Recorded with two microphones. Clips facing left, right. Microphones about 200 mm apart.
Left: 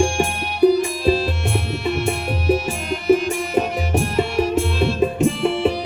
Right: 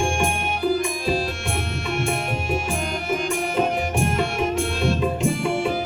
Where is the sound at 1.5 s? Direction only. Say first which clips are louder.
Left 4 dB; 50° right (ahead or behind).